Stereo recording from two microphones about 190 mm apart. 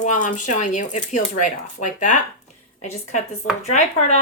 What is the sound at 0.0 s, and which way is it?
Speech, 40° left (ahead or behind).